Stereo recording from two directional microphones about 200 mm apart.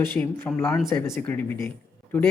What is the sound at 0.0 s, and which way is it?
Speech, 10° left (ahead or behind).